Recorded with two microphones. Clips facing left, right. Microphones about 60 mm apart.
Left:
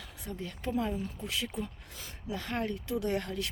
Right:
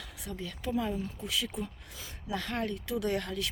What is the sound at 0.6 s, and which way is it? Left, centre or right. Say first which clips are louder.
Speech: even; centre.